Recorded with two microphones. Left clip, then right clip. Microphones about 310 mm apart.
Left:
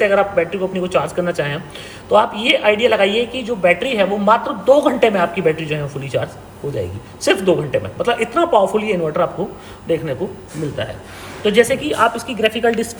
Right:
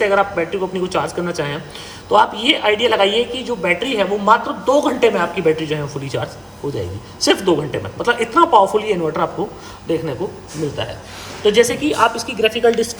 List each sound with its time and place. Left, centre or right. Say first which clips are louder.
0.0 s a woman's voice: left 1 dB; centre
11.4 s a woman's voice: even; centre